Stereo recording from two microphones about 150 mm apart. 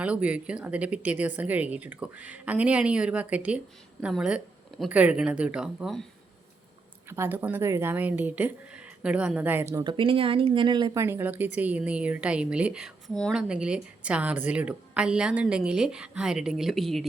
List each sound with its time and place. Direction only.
0.0 s a woman's voice: 10° right (ahead or behind)
7.1 s speech: 15° right (ahead or behind)
9.7 s speech: 35° right (ahead or behind)
10.9 s a woman's voice: 15° right (ahead or behind); by 17.1 s centre (ahead or behind)